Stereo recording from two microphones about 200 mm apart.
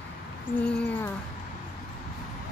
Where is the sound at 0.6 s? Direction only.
5° left (ahead or behind).